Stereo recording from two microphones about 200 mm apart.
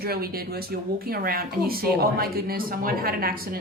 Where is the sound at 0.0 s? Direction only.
50° right (ahead or behind).